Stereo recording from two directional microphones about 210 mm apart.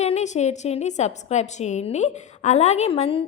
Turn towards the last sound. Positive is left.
turn(degrees=25)  # may be behind; listen again after turning